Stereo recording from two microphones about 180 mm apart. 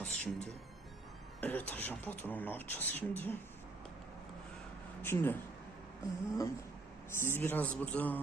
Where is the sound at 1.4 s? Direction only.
10° left (ahead or behind).